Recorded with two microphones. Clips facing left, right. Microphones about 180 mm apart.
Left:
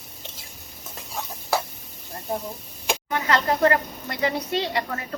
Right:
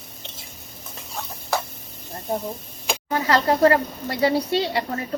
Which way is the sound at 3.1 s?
35° right (ahead or behind).